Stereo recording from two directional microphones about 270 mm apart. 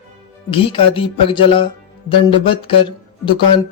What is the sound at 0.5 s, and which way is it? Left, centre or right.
Speech, centre.